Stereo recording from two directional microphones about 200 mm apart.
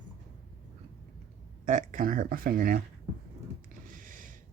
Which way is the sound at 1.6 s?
40° right (ahead or behind).